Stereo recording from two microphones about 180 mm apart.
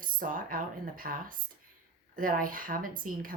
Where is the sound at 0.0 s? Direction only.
50° right (ahead or behind).